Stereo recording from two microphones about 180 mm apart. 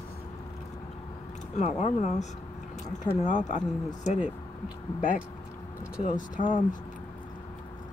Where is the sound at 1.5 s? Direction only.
40° left (ahead or behind).